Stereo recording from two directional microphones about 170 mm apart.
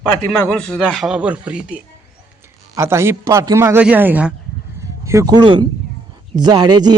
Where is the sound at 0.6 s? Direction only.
5° left (ahead or behind).